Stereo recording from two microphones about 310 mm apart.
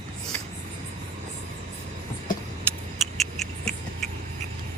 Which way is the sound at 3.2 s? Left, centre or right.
Centre.